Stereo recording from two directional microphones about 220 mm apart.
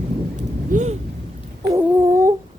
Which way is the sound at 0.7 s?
35° right (ahead or behind).